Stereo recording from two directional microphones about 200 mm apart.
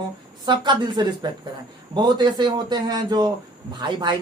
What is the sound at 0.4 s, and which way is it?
A man's voice, 20° right (ahead or behind).